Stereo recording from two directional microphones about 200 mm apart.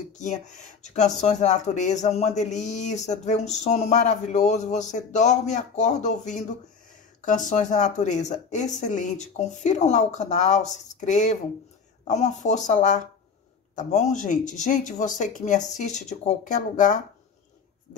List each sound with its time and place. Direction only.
0.2 s speech: 35° left (ahead or behind)